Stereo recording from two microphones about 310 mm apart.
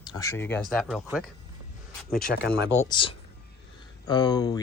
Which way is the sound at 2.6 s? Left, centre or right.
Left.